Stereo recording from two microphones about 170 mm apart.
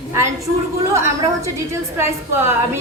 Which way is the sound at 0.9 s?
15° right (ahead or behind).